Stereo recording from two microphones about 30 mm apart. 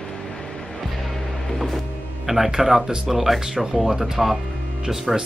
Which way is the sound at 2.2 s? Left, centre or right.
Centre.